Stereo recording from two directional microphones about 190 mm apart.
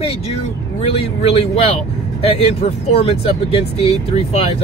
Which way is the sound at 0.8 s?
30° left (ahead or behind).